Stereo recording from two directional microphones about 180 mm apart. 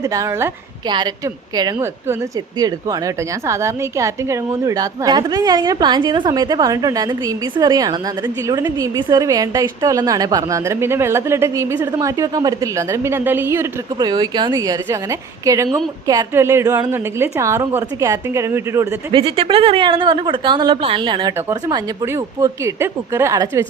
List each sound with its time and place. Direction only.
0.0 s a woman's voice: 15° right (ahead or behind)
13.9 s a woman's voice: 25° right (ahead or behind)
19.1 s a woman's voice: 30° right (ahead or behind)